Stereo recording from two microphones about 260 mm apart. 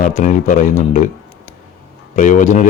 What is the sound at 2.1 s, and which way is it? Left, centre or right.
Speech, left.